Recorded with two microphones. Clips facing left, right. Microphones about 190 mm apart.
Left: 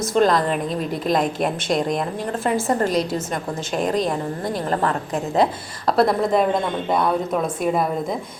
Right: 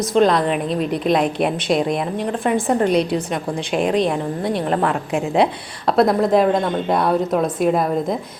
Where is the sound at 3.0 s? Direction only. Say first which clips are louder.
Right 3 dB; 45° left (ahead or behind).